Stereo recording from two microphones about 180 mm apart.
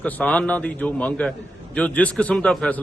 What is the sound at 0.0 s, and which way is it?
A man's voice, 10° left (ahead or behind).